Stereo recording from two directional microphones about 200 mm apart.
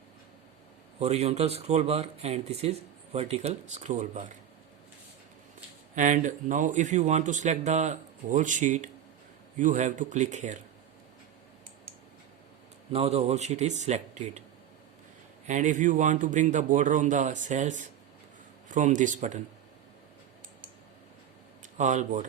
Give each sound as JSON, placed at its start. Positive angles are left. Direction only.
{"t": 0.9, "sound": "speech", "side_deg": -30}
{"t": 5.9, "sound": "speech", "side_deg": -40}
{"t": 12.9, "sound": "speech", "side_deg": -30}
{"t": 15.4, "sound": "speech", "side_deg": -40}
{"t": 21.6, "sound": "speech", "side_deg": -40}